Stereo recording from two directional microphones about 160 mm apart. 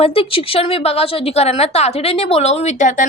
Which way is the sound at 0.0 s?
35° left (ahead or behind).